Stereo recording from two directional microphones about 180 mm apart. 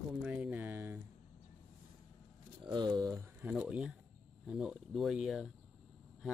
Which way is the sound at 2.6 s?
25° right (ahead or behind).